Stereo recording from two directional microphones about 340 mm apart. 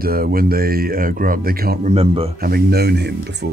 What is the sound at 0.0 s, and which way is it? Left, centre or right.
Speech, right.